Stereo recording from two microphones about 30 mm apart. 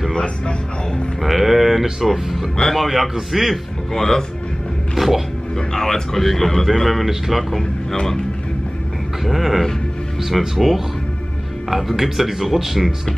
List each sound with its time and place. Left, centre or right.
0.1 s speech: left
1.2 s speech: centre
3.9 s speech: centre
4.9 s a sound: centre
5.7 s speech: centre
7.9 s speech: centre
9.2 s speech: centre
12.0 s speech: centre